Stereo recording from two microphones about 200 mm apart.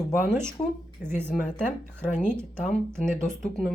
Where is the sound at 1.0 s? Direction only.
45° left (ahead or behind).